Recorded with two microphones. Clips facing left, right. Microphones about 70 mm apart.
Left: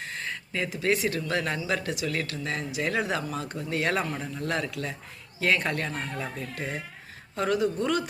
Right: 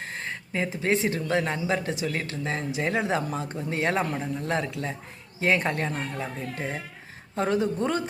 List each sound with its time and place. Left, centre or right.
0.1 s speech: right